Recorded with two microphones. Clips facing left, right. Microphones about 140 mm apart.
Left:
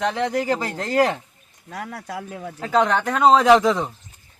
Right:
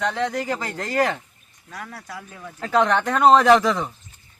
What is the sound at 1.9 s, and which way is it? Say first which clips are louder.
Speech: left 6 dB; 65° left (ahead or behind).